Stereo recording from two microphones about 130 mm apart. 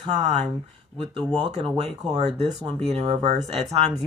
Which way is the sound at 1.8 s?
55° right (ahead or behind).